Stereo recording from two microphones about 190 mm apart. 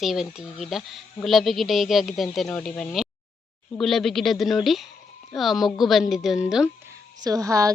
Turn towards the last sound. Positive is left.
turn(degrees=-15)  # may be behind; listen again after turning